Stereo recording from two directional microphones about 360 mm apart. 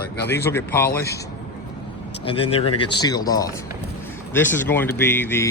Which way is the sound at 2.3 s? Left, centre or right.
Centre.